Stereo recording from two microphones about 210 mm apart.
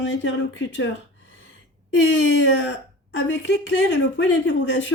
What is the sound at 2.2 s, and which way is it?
Speech, 65° left (ahead or behind).